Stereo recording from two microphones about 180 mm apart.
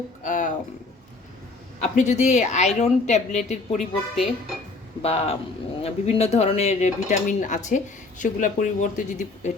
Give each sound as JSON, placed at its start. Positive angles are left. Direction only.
{"t": 0.2, "sound": "a sound", "side_deg": 45}
{"t": 2.0, "sound": "cutlery", "side_deg": 40}
{"t": 3.7, "sound": "speech", "side_deg": 0}
{"t": 5.0, "sound": "cutlery", "side_deg": 35}
{"t": 8.2, "sound": "speech", "side_deg": 45}